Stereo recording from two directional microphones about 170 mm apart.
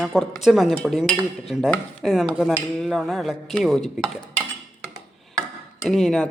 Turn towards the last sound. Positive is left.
turn(degrees=0)  # may be behind; listen again after turning